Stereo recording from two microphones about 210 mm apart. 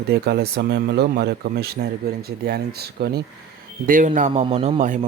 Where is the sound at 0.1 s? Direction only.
50° right (ahead or behind).